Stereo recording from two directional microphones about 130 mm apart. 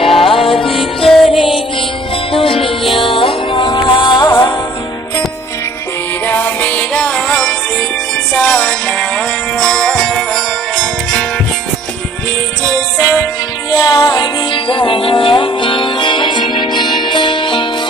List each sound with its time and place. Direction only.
0.0 s music: 45° left (ahead or behind)
0.7 s music: centre (ahead or behind)
1.3 s music: 40° left (ahead or behind)
6.2 s music: 15° left (ahead or behind)
13.7 s music: 30° left (ahead or behind)